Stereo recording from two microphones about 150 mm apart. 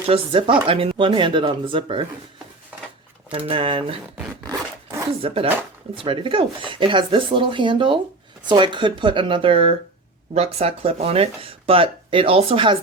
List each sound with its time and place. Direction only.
0.1 s speech: 35° right (ahead or behind)
3.3 s speech: 40° right (ahead or behind)
5.2 s speech: 40° right (ahead or behind)